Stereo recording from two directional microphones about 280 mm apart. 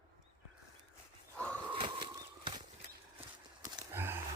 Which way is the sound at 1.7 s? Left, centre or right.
Centre.